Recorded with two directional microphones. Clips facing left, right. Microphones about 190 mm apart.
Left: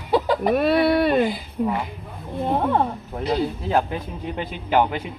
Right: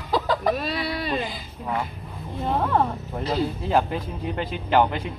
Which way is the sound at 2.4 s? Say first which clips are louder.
Left 2 dB; 15° left (ahead or behind).